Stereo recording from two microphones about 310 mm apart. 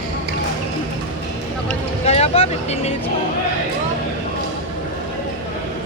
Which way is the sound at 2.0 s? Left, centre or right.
Centre.